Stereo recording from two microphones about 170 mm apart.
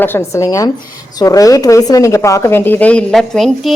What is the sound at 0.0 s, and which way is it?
Speech, 15° left (ahead or behind).